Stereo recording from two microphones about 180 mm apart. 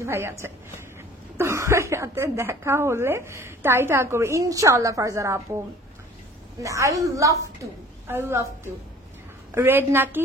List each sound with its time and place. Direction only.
0.0 s speech: 15° right (ahead or behind)
6.6 s speech: 15° right (ahead or behind)